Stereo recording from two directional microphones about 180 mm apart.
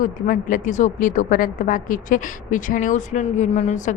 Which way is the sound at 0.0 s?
50° left (ahead or behind).